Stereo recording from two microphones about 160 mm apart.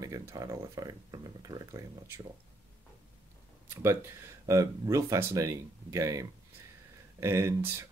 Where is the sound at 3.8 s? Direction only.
15° right (ahead or behind).